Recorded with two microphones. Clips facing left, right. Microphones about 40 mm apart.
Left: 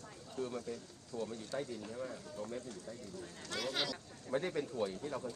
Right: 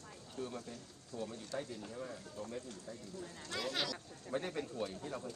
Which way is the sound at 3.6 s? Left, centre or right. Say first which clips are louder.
Left 1 dB; centre.